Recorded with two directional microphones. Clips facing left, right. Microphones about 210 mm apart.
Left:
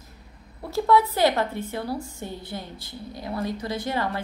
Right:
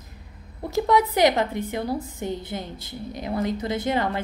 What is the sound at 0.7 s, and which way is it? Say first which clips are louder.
A woman's voice: even; 15° right (ahead or behind).